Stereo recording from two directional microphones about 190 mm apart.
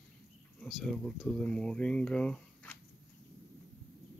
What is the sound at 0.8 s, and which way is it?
Speech, centre (ahead or behind).